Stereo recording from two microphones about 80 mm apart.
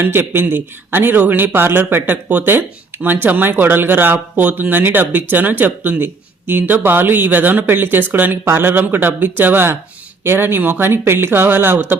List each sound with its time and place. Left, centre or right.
0.0 s a man's voice: right